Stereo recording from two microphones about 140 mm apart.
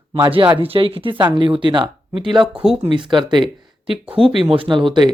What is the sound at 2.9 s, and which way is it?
A woman's voice, 35° right (ahead or behind).